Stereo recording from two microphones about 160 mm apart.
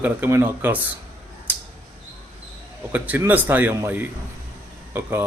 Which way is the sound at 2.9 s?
10° right (ahead or behind).